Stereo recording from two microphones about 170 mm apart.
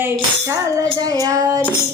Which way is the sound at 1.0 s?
20° right (ahead or behind).